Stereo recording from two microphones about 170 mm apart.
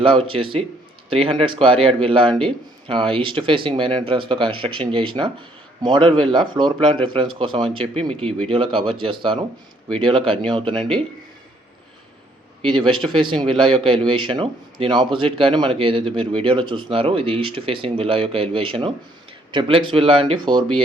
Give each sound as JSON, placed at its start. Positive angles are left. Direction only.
{"t": 0.0, "sound": "speech", "side_deg": -30}
{"t": 12.7, "sound": "speech", "side_deg": -30}